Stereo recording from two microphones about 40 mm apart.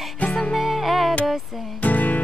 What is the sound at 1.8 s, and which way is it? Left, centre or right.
Music, left.